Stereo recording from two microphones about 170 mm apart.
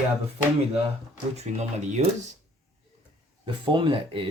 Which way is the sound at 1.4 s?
45° right (ahead or behind).